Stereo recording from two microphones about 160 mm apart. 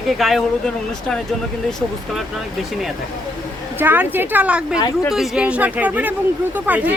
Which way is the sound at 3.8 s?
10° right (ahead or behind).